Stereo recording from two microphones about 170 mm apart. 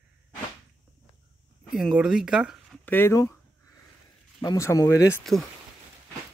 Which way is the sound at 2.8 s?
10° left (ahead or behind).